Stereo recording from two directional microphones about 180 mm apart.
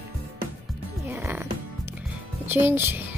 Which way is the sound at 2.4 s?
10° right (ahead or behind).